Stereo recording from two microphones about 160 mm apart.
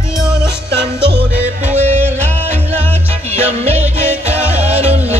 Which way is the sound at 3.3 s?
45° right (ahead or behind).